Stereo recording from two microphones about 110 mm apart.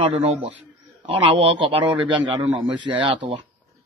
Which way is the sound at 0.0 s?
65° right (ahead or behind).